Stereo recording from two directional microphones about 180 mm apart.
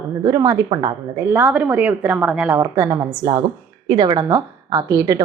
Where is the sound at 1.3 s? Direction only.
10° right (ahead or behind).